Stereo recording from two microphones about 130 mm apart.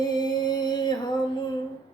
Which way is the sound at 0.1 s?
35° left (ahead or behind).